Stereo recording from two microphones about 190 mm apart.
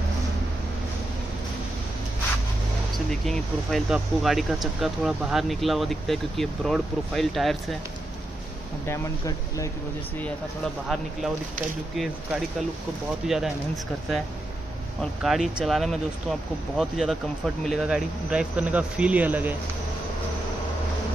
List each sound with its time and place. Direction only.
3.1 s speech: centre (ahead or behind)
8.8 s speech: 15° left (ahead or behind)
10.2 s speech: 5° left (ahead or behind)
13.2 s speech: centre (ahead or behind)
15.2 s speech: centre (ahead or behind)